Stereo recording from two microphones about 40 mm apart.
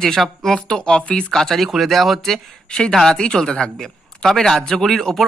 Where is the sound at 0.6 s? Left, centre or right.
Left.